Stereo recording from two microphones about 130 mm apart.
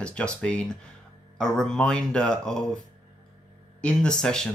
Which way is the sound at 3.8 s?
5° left (ahead or behind).